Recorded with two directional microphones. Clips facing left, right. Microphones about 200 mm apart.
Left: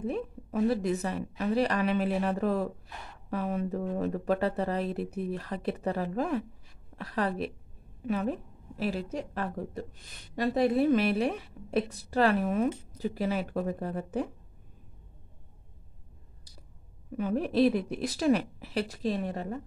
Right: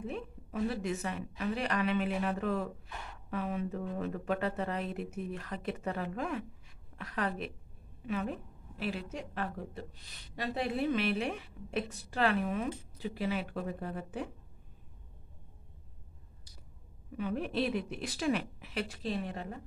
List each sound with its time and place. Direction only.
0.0 s a woman's voice: 40° left (ahead or behind)
17.2 s a woman's voice: 40° left (ahead or behind)